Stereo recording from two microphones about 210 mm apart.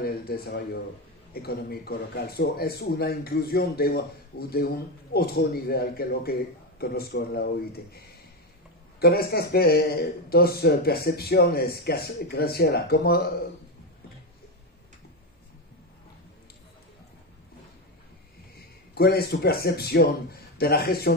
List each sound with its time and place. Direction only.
0.0 s speech: 45° left (ahead or behind)
9.0 s speech: 45° left (ahead or behind)
18.9 s speech: 45° left (ahead or behind)